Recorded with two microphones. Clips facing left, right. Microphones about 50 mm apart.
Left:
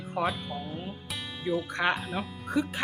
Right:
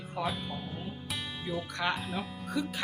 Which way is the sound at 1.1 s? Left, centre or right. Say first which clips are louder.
Left 6 dB; centre.